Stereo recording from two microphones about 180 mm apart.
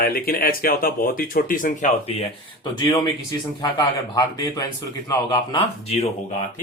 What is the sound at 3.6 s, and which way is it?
A man's voice, 25° left (ahead or behind).